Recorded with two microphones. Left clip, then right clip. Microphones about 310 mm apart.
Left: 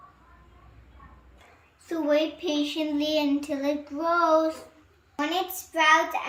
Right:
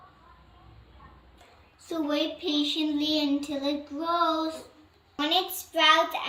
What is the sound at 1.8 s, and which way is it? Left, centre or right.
A child's voice, centre.